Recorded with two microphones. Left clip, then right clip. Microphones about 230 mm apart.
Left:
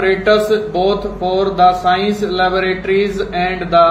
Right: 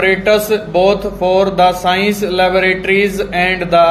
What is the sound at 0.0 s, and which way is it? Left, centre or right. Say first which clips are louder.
Speech: right 1 dB; right.